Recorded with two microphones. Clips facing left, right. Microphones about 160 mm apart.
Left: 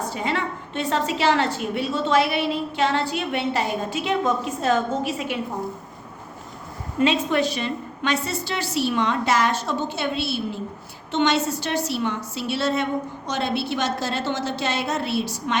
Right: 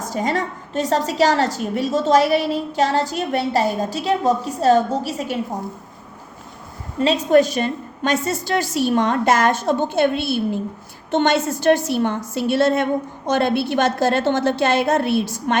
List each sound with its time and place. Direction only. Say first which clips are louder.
0.1 s a woman's voice: right 4 dB; 40° right (ahead or behind)
7.0 s a woman's voice: right 5 dB; 40° right (ahead or behind)